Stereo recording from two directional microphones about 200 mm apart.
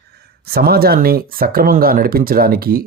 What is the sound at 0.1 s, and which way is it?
Speech, 50° right (ahead or behind).